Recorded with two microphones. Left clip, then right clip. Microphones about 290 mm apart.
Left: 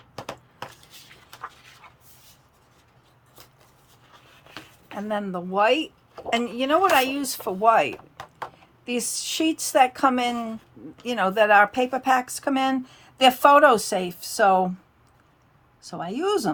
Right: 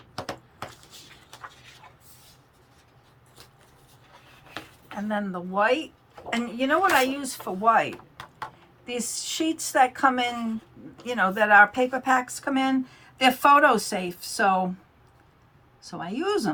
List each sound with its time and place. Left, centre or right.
4.9 s speech: left
8.9 s speech: left
15.8 s speech: left